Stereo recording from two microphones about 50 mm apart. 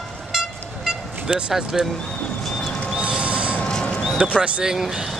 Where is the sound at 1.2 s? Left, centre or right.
Centre.